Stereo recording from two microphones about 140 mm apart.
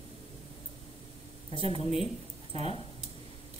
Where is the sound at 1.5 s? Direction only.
40° left (ahead or behind).